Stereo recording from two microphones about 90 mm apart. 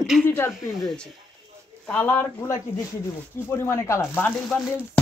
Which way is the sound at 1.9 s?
20° left (ahead or behind).